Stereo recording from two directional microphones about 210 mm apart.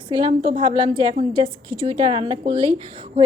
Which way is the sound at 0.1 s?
20° right (ahead or behind).